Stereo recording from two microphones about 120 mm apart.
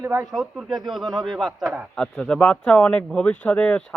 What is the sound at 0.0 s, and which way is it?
Speech, 25° right (ahead or behind).